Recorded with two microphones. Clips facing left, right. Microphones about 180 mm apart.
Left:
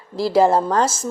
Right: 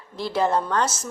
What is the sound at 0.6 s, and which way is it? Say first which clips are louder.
Speech: left 5 dB; 35° left (ahead or behind).